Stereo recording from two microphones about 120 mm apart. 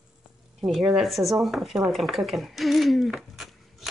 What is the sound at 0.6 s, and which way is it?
Speech, centre (ahead or behind).